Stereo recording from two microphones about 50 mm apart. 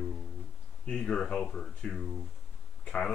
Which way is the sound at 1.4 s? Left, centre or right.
Centre.